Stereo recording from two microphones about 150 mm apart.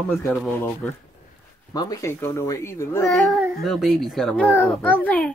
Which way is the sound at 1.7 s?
20° left (ahead or behind).